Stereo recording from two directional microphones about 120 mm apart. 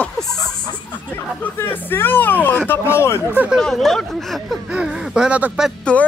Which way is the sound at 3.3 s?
15° right (ahead or behind).